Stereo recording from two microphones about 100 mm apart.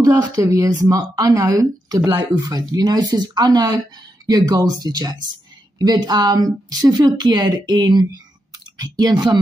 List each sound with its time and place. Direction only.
0.0 s a woman's voice: 35° right (ahead or behind)